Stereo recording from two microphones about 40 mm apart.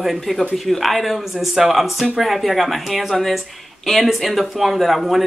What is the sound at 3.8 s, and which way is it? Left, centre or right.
Speech, centre.